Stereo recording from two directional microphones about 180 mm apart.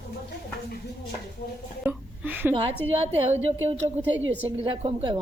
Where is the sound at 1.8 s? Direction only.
10° right (ahead or behind).